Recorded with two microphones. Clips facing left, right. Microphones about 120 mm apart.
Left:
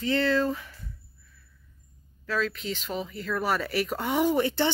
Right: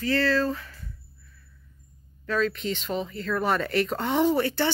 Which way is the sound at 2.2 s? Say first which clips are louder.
Right 3 dB; centre (ahead or behind).